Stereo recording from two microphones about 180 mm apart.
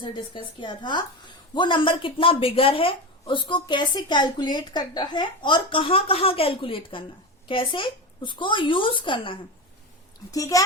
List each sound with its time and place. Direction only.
0.0 s a woman's voice: 25° left (ahead or behind)